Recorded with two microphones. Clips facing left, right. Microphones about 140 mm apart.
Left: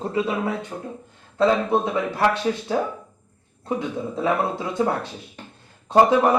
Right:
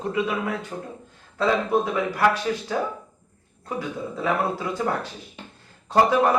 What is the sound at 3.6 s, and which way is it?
Speech, 25° left (ahead or behind).